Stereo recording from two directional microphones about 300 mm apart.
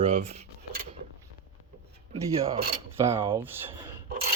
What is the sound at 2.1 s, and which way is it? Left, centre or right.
Speech, right.